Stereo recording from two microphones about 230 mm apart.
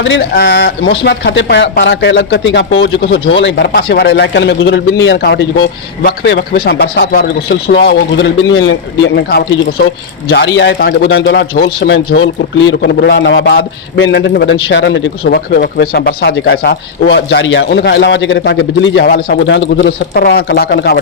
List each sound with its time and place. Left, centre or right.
0.0 s a man's voice: left